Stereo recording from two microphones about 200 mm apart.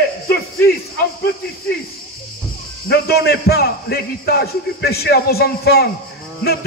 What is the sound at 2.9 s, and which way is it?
Speech, 50° left (ahead or behind).